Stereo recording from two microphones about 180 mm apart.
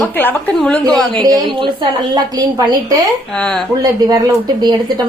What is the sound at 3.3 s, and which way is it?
Speech, 5° left (ahead or behind).